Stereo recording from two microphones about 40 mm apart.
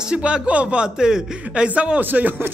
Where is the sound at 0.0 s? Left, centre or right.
Right.